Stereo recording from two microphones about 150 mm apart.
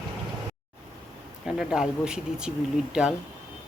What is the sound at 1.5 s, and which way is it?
Speech, 5° right (ahead or behind).